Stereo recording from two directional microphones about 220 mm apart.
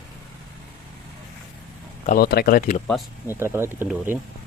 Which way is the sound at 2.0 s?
45° left (ahead or behind).